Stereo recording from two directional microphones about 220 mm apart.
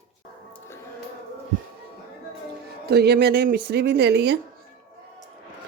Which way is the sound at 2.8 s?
45° right (ahead or behind).